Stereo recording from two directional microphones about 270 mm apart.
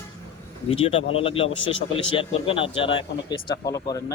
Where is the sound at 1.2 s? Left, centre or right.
Left.